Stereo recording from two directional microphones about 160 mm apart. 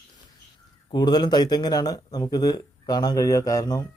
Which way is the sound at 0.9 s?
25° left (ahead or behind).